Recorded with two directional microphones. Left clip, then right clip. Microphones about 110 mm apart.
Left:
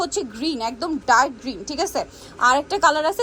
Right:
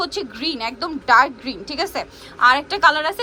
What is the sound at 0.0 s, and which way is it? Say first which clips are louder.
Speech: even; 35° left (ahead or behind).